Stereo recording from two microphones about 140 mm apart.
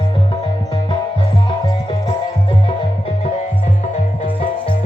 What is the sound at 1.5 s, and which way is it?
Music, 35° left (ahead or behind).